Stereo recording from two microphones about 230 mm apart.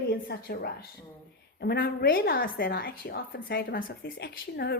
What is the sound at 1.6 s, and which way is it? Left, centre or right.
A woman's voice, left.